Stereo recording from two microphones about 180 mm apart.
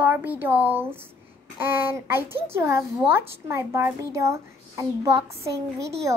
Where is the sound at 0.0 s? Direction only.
10° right (ahead or behind).